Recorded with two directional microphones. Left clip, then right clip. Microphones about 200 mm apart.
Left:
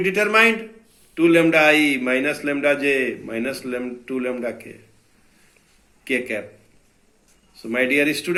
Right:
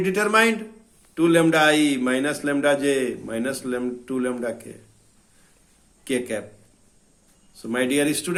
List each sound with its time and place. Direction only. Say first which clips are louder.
0.0 s a man's voice: left 3 dB; 55° right (ahead or behind)
6.1 s a man's voice: left 2 dB; 55° right (ahead or behind)
7.5 s a man's voice: left 3 dB; 55° right (ahead or behind)